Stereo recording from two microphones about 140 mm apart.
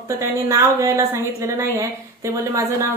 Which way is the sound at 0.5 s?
20° right (ahead or behind).